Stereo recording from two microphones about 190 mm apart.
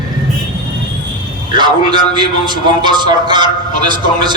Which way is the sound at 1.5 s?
25° right (ahead or behind).